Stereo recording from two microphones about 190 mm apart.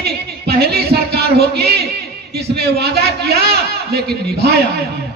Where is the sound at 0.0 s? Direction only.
55° right (ahead or behind).